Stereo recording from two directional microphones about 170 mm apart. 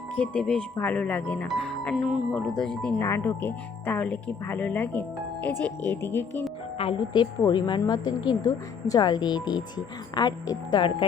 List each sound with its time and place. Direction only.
0.2 s speech: 5° left (ahead or behind)
3.0 s speech: 15° left (ahead or behind)
6.7 s speech: 30° left (ahead or behind)